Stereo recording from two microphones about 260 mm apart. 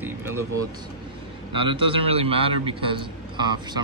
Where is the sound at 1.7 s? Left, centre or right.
Right.